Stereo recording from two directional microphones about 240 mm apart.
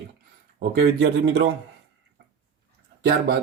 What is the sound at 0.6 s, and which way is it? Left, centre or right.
Speech, right.